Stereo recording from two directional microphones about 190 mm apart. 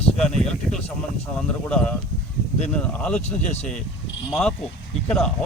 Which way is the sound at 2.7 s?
5° left (ahead or behind).